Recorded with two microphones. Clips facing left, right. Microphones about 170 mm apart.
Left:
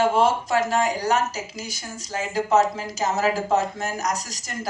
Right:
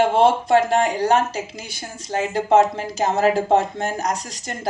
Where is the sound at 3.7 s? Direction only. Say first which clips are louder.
Right 3 dB; 30° right (ahead or behind).